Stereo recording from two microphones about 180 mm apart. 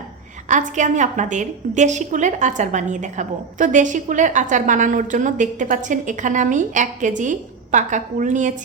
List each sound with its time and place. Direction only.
0.4 s a woman's voice: 40° right (ahead or behind)